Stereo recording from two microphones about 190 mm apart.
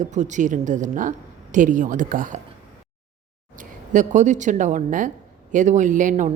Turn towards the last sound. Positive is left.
turn(degrees=-40)  # may be behind; listen again after turning